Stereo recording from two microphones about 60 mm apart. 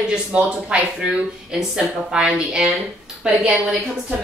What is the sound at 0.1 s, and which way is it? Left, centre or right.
A woman's voice, centre.